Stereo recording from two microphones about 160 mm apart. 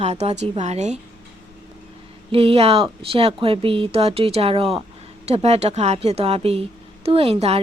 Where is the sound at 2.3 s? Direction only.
35° right (ahead or behind).